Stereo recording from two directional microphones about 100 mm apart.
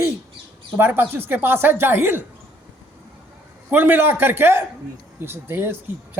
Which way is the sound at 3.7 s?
20° right (ahead or behind).